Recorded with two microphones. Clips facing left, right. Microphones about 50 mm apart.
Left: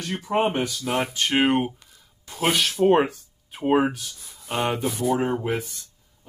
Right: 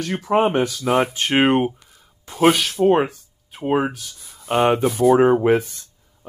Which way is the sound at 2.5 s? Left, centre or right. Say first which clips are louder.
Right 2 dB; centre.